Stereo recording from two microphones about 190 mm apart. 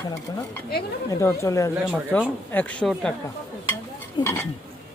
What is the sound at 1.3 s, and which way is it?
Speech, 15° left (ahead or behind).